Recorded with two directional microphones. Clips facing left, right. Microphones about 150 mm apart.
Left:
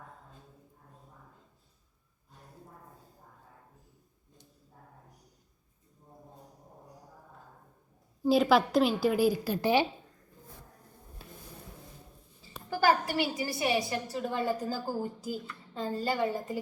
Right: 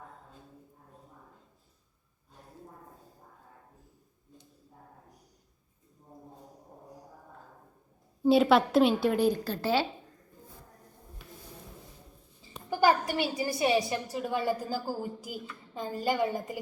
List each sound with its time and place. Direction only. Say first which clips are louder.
8.2 s a woman's voice: right 2 dB; centre (ahead or behind); by 9.8 s 15° left (ahead or behind)
12.7 s a sound: right 1 dB; 20° right (ahead or behind)
13.3 s a woman's voice: right 3 dB; 25° right (ahead or behind)